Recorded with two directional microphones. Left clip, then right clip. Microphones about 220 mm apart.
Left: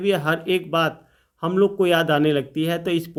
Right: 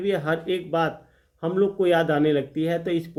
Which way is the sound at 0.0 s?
35° left (ahead or behind).